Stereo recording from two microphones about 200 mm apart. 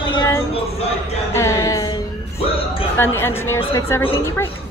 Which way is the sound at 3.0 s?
10° left (ahead or behind).